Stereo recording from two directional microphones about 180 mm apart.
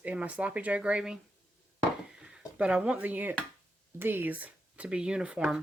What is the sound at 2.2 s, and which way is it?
Speech, 5° right (ahead or behind).